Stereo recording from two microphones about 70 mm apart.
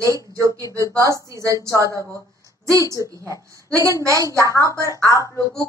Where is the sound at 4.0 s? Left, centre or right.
Right.